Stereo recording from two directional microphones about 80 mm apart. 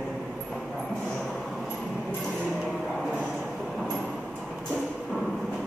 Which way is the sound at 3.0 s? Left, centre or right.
Centre.